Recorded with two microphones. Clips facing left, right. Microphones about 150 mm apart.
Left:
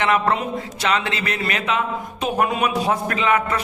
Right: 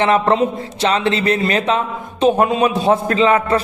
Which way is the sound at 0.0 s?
30° right (ahead or behind).